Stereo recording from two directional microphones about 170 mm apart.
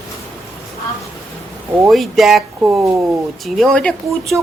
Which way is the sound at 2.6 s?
15° right (ahead or behind).